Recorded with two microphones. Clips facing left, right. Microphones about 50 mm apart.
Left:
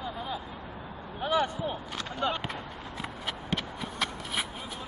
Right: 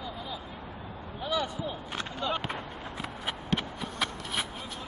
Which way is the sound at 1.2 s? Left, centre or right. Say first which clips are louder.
Left 4 dB; left.